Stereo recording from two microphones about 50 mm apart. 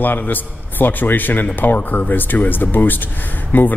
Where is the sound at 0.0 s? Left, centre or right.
Left.